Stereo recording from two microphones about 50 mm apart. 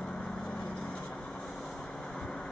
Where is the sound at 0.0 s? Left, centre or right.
Centre.